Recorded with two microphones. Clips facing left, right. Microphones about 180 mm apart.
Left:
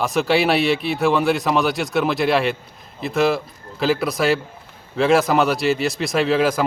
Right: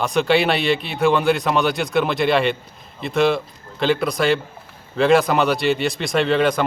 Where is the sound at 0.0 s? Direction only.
Centre (ahead or behind).